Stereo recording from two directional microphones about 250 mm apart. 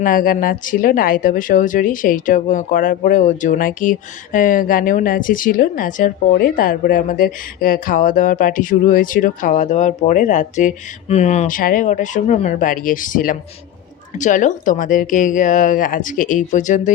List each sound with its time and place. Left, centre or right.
0.0 s speech: left